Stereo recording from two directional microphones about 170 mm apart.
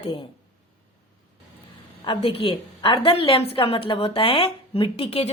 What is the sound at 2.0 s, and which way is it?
A woman's voice, 30° left (ahead or behind).